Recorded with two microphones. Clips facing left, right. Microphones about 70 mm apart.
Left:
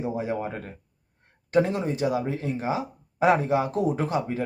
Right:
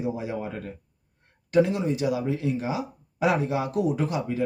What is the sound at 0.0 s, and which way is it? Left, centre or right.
Speech, left.